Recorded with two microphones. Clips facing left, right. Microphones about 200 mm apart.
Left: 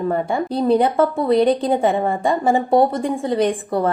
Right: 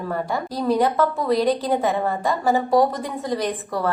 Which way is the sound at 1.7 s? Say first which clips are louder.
Left 3 dB; 25° left (ahead or behind).